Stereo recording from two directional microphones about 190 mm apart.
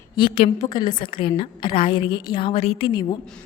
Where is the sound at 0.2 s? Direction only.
30° left (ahead or behind).